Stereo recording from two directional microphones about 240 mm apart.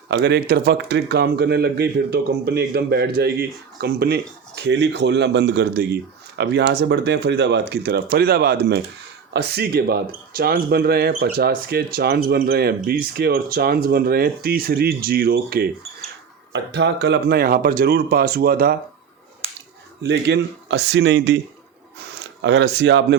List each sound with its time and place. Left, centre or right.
0.1 s speech: right
20.0 s speech: right